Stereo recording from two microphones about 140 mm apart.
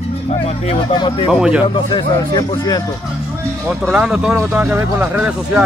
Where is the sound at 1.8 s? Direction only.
35° left (ahead or behind).